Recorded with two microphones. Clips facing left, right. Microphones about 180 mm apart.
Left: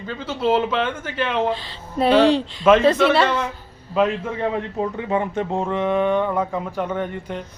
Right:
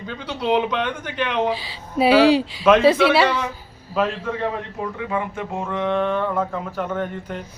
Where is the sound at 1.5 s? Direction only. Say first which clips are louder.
Even; 5° right (ahead or behind).